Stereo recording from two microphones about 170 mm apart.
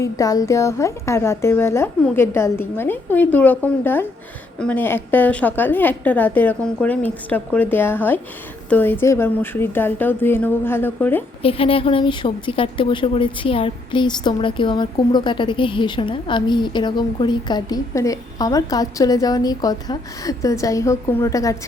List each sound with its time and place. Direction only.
0.0 s a woman's voice: 20° left (ahead or behind)
11.4 s a woman's voice: 35° left (ahead or behind)